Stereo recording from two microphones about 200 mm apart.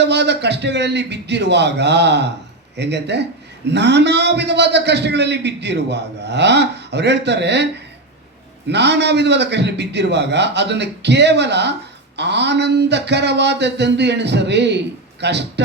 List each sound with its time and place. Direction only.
0.0 s a man's voice: 60° right (ahead or behind)
8.7 s a man's voice: 60° right (ahead or behind)